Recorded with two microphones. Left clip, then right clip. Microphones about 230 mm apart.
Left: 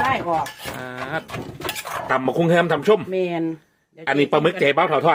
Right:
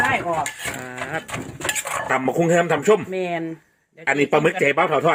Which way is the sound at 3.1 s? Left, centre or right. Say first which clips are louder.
Left 2 dB; left.